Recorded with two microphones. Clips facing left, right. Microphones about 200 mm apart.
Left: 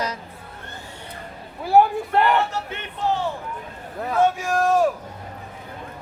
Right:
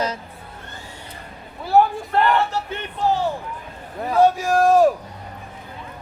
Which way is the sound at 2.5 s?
35° right (ahead or behind).